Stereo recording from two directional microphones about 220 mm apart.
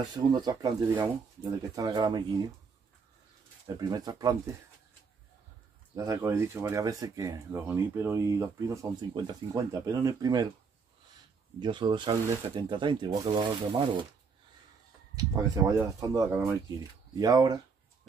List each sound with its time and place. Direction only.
0.1 s speech: 20° right (ahead or behind)
3.6 s speech: 20° right (ahead or behind)
5.9 s speech: 15° right (ahead or behind)
11.6 s speech: 20° right (ahead or behind)
15.1 s speech: 15° right (ahead or behind)